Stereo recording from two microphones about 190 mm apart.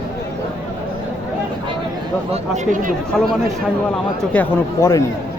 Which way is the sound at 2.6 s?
40° right (ahead or behind).